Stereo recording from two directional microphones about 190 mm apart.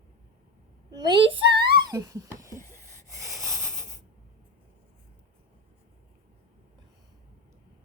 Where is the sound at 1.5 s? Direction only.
60° right (ahead or behind).